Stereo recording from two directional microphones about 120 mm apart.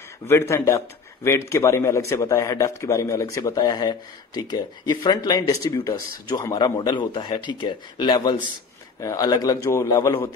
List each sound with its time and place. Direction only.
0.3 s a man's voice: 25° left (ahead or behind)